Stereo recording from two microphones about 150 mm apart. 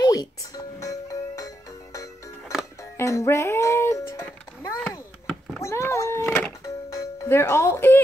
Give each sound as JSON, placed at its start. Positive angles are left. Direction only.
{"t": 0.0, "sound": "music", "side_deg": 25}
{"t": 3.0, "sound": "music", "side_deg": 20}